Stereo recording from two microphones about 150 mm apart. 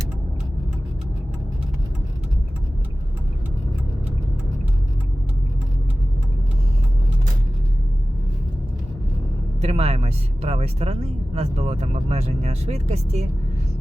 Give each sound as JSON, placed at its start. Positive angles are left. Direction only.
{"t": 9.6, "sound": "speech", "side_deg": -45}